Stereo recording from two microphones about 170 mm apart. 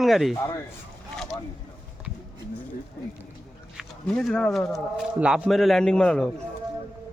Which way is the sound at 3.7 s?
5° left (ahead or behind).